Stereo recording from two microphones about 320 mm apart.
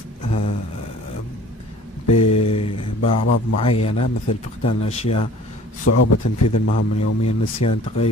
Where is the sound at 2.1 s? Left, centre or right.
Left.